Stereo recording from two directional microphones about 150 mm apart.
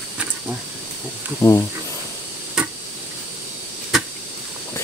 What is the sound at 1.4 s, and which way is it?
Speech, 20° left (ahead or behind).